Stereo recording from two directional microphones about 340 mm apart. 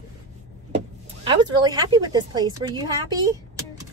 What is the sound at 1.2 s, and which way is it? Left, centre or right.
Speech, centre.